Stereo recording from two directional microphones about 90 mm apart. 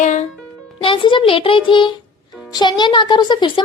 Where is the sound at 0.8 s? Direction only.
70° left (ahead or behind).